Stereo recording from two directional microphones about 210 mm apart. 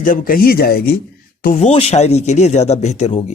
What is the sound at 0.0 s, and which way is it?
Speech, 40° left (ahead or behind).